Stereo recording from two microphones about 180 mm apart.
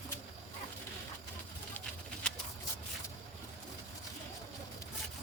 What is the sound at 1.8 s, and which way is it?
Bird, 5° left (ahead or behind).